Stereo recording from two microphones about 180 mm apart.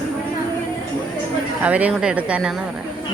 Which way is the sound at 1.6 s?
10° right (ahead or behind).